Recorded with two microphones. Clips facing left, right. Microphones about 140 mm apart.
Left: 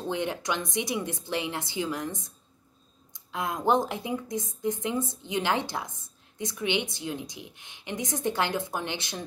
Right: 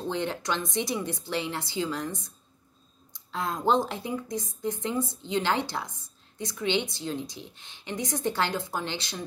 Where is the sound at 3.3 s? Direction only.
15° left (ahead or behind).